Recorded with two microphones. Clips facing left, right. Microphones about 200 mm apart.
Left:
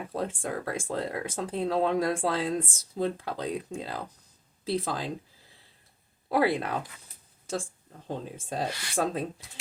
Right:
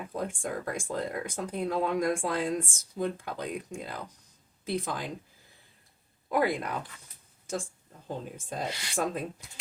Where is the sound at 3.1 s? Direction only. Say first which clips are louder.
Left 3 dB; 90° left.